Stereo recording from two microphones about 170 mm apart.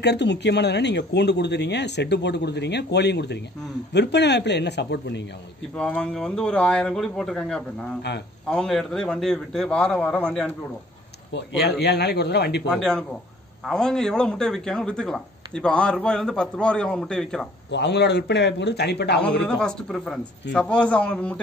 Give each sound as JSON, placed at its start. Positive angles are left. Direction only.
{"t": 0.0, "sound": "speech", "side_deg": 85}
{"t": 5.8, "sound": "a man's voice", "side_deg": 5}
{"t": 11.3, "sound": "a man's voice", "side_deg": 75}
{"t": 12.7, "sound": "a man's voice", "side_deg": 5}
{"t": 17.6, "sound": "a man's voice", "side_deg": 85}
{"t": 19.4, "sound": "a man's voice", "side_deg": 5}